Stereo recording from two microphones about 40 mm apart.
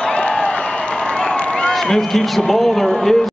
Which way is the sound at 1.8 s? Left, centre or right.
Centre.